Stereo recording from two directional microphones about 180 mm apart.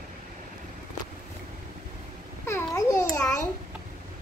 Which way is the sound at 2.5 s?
15° left (ahead or behind).